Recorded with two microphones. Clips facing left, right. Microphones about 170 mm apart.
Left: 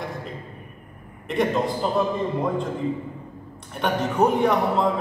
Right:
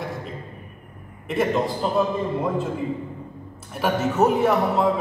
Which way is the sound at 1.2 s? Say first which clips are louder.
Even; centre (ahead or behind).